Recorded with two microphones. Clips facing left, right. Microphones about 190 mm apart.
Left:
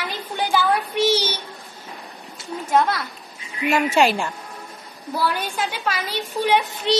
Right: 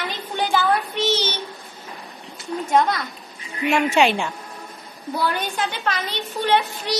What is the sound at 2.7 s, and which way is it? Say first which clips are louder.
A woman's voice: even; 5° left (ahead or behind).